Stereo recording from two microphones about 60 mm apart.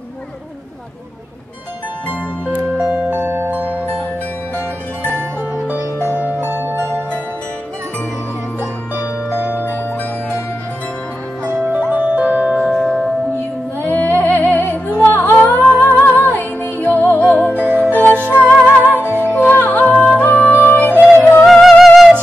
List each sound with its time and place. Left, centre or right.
2.0 s music: left
2.8 s music: centre
3.1 s music: right
6.4 s music: right
11.4 s music: right
12.5 s music: centre
13.7 s music: left
18.2 s music: right
19.3 s music: left
21.5 s music: centre